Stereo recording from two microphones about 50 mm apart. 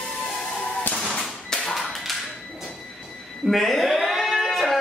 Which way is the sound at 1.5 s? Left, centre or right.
Centre.